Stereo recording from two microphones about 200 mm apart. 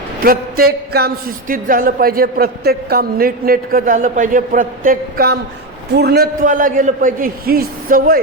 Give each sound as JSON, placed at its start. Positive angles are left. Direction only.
{"t": 0.2, "sound": "a man's voice", "side_deg": -45}